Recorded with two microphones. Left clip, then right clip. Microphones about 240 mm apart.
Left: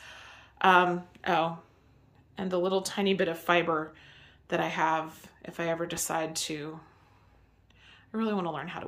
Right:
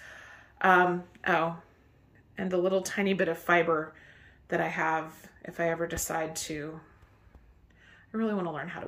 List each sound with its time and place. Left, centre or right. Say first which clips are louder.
0.2 s a sound: left 2 dB; centre
2.4 s speech: right 1 dB; centre
8.1 s speech: even; centre